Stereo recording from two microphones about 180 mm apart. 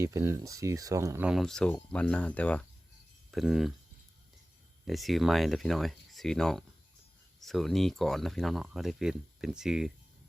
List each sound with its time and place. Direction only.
0.0 s speech: 15° right (ahead or behind)
1.3 s speech: centre (ahead or behind)
4.9 s speech: centre (ahead or behind)